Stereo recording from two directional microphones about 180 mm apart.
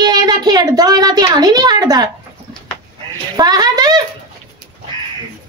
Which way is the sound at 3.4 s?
20° right (ahead or behind).